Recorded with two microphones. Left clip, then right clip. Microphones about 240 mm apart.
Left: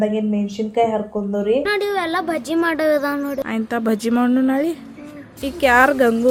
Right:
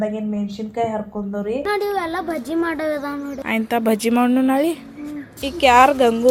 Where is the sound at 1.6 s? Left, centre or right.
Centre.